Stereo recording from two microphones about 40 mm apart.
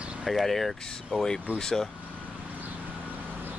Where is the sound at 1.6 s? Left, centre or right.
Centre.